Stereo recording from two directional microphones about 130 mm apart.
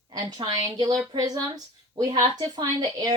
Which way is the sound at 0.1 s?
30° right (ahead or behind).